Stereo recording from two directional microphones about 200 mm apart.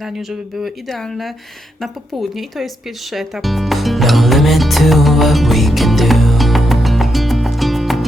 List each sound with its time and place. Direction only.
0.0 s speech: centre (ahead or behind)
3.1 s music: centre (ahead or behind)